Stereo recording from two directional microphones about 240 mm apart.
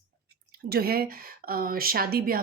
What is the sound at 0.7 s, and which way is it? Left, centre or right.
Speech, right.